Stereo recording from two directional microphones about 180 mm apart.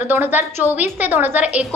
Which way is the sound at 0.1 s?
10° right (ahead or behind).